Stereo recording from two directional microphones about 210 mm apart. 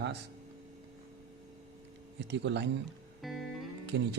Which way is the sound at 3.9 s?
60° right (ahead or behind).